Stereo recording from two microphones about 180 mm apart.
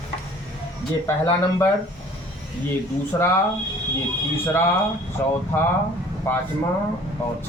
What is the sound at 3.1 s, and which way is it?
Speech, 20° left (ahead or behind).